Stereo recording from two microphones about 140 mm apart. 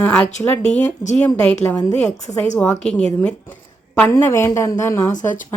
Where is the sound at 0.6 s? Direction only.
55° left (ahead or behind).